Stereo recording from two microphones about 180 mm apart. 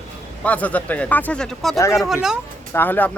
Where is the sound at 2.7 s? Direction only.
10° left (ahead or behind).